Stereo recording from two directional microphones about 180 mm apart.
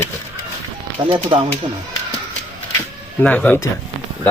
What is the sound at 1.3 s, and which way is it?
Speech, 30° right (ahead or behind).